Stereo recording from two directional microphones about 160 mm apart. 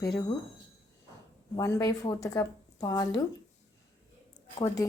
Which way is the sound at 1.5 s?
25° left (ahead or behind).